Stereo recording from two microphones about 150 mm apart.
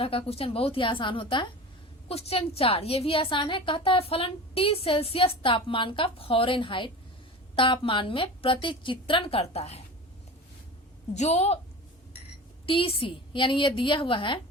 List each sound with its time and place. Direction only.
0.0 s a woman's voice: 40° left (ahead or behind)
11.1 s a woman's voice: 50° left (ahead or behind)
12.6 s a woman's voice: 35° left (ahead or behind)